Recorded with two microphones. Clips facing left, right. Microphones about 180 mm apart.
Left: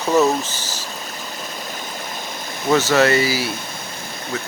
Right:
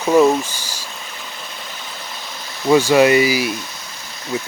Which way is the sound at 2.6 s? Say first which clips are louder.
Right 4 dB; 15° right (ahead or behind).